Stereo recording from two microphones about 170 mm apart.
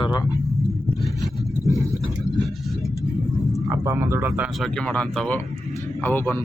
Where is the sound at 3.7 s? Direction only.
15° right (ahead or behind).